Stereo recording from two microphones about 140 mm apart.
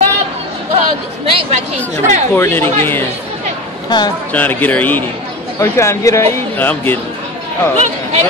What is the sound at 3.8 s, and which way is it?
Speech, 30° left (ahead or behind).